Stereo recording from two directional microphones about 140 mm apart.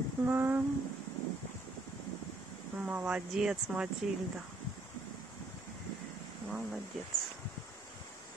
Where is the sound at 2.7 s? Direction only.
10° right (ahead or behind).